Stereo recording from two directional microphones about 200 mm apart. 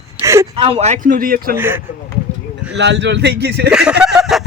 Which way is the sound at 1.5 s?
10° right (ahead or behind).